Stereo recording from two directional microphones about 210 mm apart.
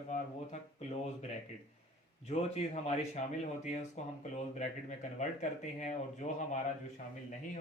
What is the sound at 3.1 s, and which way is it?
Speech, 30° left (ahead or behind).